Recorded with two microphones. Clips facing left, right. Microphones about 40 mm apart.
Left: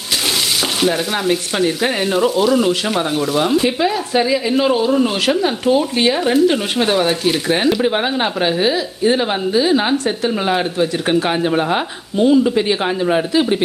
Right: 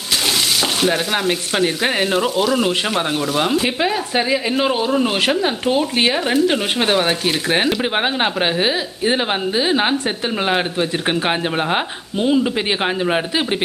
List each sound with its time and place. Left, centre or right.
0.8 s frying: centre
3.8 s frying: centre
7.8 s speech: right